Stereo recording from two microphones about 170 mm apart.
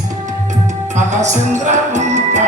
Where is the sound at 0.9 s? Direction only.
45° right (ahead or behind).